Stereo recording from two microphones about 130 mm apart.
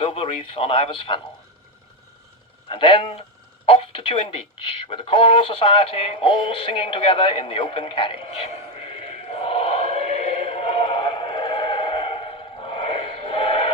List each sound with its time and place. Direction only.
0.0 s a man's voice: 45° left (ahead or behind)
2.6 s a man's voice: 40° left (ahead or behind)
4.9 s synthetic singing: 45° left (ahead or behind)